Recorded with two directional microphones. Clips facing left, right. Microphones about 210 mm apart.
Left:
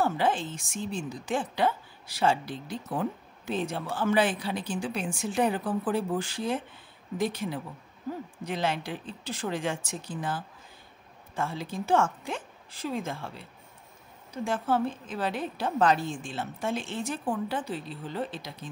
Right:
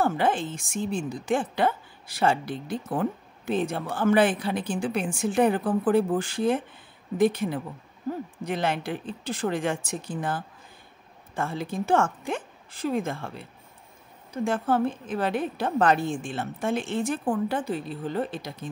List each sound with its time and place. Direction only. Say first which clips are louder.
0.0 s a woman's voice: right 2 dB; 55° right (ahead or behind)
14.4 s a woman's voice: right 3 dB; 55° right (ahead or behind)